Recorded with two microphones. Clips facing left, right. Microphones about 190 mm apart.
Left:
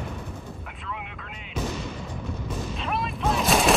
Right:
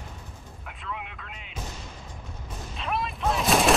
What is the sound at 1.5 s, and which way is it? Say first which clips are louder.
Artillery fire: left 11 dB; 75° left (ahead or behind).